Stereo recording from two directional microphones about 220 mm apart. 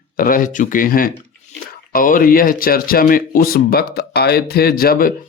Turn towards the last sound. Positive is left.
turn(degrees=40)  # may be behind; listen again after turning